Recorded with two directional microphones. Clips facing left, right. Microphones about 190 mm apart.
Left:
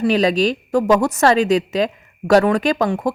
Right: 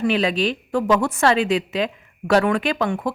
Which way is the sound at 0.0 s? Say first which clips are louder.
Left 4 dB; 40° left (ahead or behind).